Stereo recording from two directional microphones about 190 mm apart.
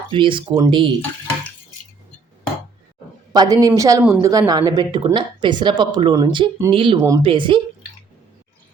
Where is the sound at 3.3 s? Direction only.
20° right (ahead or behind).